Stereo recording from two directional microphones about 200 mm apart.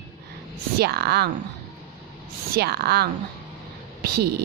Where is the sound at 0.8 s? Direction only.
55° right (ahead or behind).